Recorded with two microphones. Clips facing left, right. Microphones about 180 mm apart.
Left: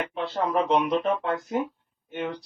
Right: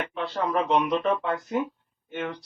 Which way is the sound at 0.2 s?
Centre (ahead or behind).